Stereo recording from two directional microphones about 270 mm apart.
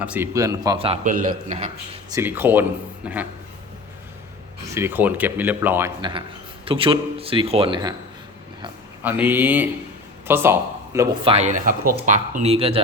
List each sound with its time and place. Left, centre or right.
0.0 s a man's voice: centre; by 1.7 s right
2.0 s a man's voice: centre
4.7 s a man's voice: centre
9.0 s a man's voice: centre